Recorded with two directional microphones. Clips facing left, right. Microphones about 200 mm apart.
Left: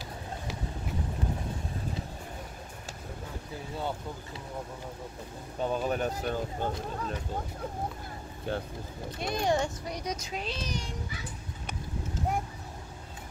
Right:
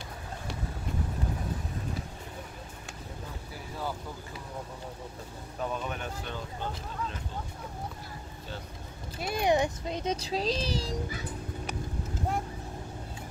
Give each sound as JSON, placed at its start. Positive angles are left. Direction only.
{"t": 5.6, "sound": "speech", "side_deg": 30}
{"t": 9.2, "sound": "speech", "side_deg": -10}